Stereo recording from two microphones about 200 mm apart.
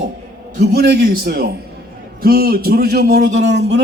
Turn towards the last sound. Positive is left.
turn(degrees=-60)  # may be behind; listen again after turning